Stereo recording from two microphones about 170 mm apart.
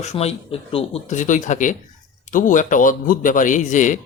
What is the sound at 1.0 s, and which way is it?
Speech, 45° left (ahead or behind).